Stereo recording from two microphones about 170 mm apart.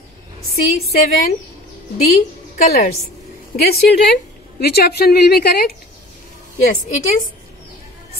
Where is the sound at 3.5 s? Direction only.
65° left (ahead or behind).